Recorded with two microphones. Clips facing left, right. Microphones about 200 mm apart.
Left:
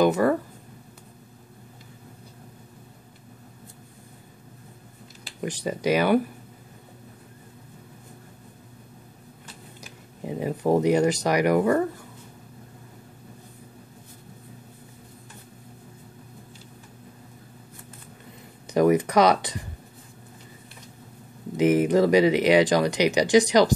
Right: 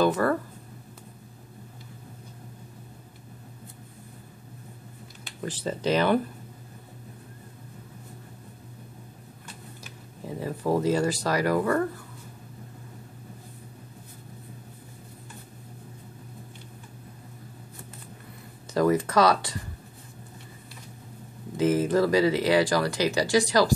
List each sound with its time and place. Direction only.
0.0 s speech: 15° left (ahead or behind)
5.4 s speech: 15° left (ahead or behind)
10.2 s speech: 20° left (ahead or behind)
18.7 s speech: 20° left (ahead or behind)
21.5 s speech: 20° left (ahead or behind)